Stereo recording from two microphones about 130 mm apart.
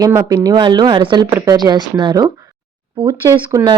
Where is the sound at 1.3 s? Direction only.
25° right (ahead or behind).